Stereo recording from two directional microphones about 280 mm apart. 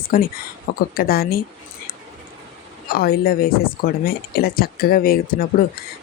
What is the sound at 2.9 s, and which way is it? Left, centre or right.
Speech, left.